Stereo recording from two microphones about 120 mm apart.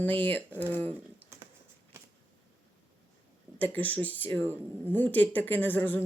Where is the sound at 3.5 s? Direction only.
15° left (ahead or behind).